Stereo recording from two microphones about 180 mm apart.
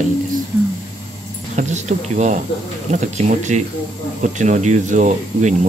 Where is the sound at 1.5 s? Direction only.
40° right (ahead or behind).